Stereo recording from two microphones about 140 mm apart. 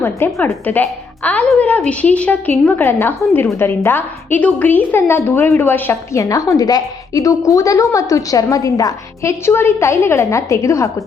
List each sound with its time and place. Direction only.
0.4 s a woman's voice: 15° left (ahead or behind)